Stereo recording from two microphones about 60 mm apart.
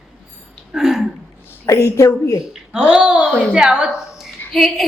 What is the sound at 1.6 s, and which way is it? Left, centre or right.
Speech, left.